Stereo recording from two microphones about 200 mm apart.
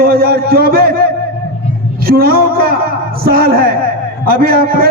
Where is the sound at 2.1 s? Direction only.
50° right (ahead or behind).